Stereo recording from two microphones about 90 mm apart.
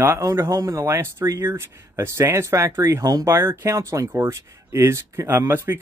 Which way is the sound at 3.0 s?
45° right (ahead or behind).